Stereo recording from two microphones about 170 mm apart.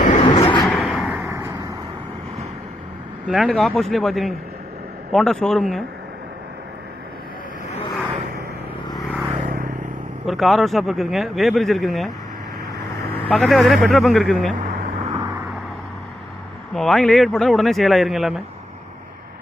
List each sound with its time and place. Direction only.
0.2 s vehicle: 30° left (ahead or behind)
0.6 s a sound: centre (ahead or behind)
1.2 s a sound: 15° right (ahead or behind)
3.2 s speech: centre (ahead or behind)
9.4 s vehicle: 55° right (ahead or behind)
10.2 s speech: centre (ahead or behind)
13.2 s speech: centre (ahead or behind)
14.6 s a sound: 40° right (ahead or behind)
16.7 s speech: centre (ahead or behind)